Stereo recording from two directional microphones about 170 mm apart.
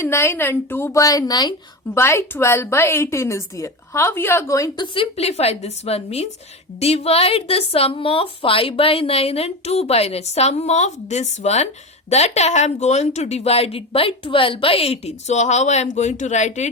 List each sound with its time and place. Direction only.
0.0 s a woman's voice: 15° left (ahead or behind)
4.9 s a woman's voice: 40° left (ahead or behind)